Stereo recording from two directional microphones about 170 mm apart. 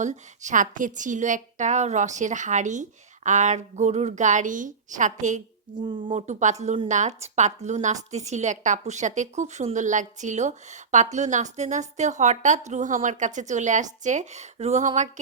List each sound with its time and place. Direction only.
0.0 s a woman's voice: 45° right (ahead or behind)
5.7 s speech: 25° right (ahead or behind)
6.1 s a woman's voice: 45° right (ahead or behind)